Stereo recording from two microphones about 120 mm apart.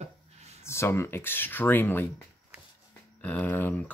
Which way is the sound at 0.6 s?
20° left (ahead or behind).